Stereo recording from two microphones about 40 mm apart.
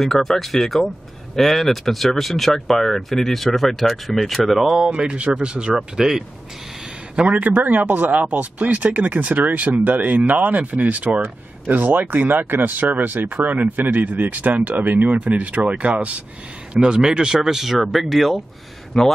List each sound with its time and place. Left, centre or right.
0.0 s speech: centre
4.4 s speech: centre
4.7 s speech: right
5.8 s speech: centre
7.2 s speech: right
11.2 s speech: right
16.8 s speech: centre
17.4 s speech: centre
18.9 s a man's voice: centre